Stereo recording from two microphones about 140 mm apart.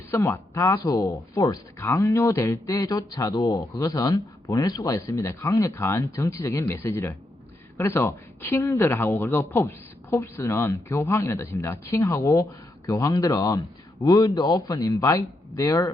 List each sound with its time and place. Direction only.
0.1 s speech: 20° left (ahead or behind)